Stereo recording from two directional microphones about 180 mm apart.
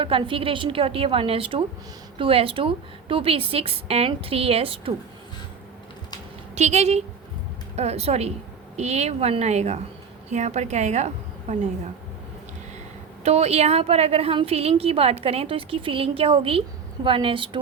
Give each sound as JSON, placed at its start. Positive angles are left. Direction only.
{"t": 0.0, "sound": "a woman's voice", "side_deg": -30}
{"t": 6.6, "sound": "a woman's voice", "side_deg": -40}
{"t": 13.2, "sound": "a woman's voice", "side_deg": -35}